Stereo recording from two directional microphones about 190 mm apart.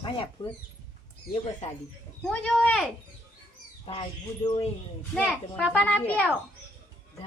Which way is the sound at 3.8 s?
25° left (ahead or behind).